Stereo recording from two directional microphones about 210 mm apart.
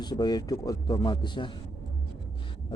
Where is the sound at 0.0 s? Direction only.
20° left (ahead or behind).